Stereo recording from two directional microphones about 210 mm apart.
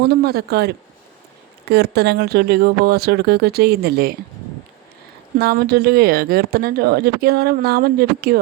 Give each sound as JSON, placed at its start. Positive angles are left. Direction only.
{"t": 0.0, "sound": "speech", "side_deg": -50}
{"t": 5.4, "sound": "speech", "side_deg": -50}